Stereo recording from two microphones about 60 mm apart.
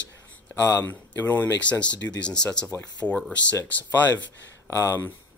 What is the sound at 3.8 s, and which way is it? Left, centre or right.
Speech, left.